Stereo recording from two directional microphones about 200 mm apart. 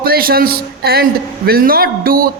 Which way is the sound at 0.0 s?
50° right (ahead or behind).